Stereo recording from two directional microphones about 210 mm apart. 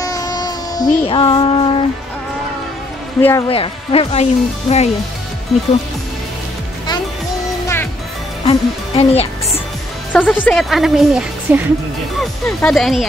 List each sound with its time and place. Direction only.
0.0 s child singing: 15° left (ahead or behind)
1.0 s speech: 25° left (ahead or behind)
3.2 s speech: 10° left (ahead or behind)
3.4 s speech: 25° left (ahead or behind)
5.5 s speech: centre (ahead or behind)
7.6 s music: 10° left (ahead or behind)
8.5 s speech: 30° left (ahead or behind)
10.1 s speech: 10° left (ahead or behind)
12.6 s speech: centre (ahead or behind)